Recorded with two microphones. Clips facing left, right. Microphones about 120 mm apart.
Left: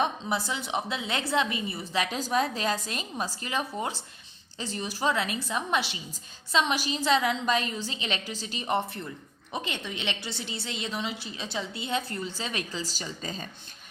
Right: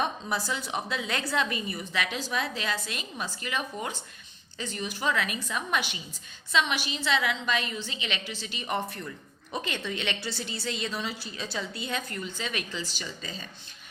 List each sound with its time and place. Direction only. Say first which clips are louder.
0.0 s a woman's voice: left 2 dB; 25° left (ahead or behind); by 13.5 s 45° left (ahead or behind)